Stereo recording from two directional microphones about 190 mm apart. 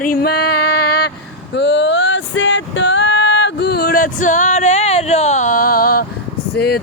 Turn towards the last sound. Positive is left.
turn(degrees=55)  # may be behind; listen again after turning